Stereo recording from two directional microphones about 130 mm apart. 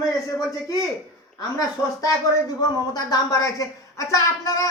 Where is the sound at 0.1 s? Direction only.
25° left (ahead or behind).